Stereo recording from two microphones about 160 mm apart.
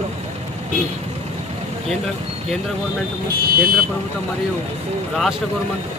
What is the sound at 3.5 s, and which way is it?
Speech, 65° right (ahead or behind).